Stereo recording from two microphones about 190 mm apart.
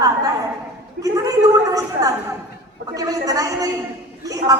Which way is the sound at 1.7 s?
20° right (ahead or behind).